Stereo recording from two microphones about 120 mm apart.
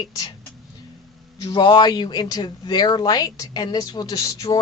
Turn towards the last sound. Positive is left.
turn(degrees=30)  # may be behind; listen again after turning